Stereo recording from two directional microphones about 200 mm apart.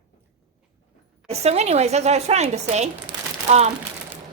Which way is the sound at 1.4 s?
35° right (ahead or behind).